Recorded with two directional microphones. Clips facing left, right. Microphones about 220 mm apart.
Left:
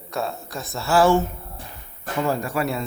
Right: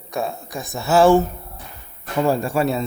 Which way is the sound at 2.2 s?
30° right (ahead or behind).